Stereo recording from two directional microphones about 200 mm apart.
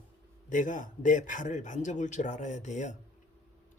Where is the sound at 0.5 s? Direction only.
40° left (ahead or behind).